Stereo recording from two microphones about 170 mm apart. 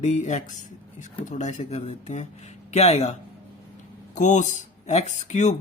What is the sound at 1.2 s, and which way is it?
Speech, 45° left (ahead or behind).